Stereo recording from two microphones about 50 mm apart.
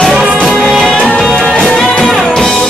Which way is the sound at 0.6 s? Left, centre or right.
Centre.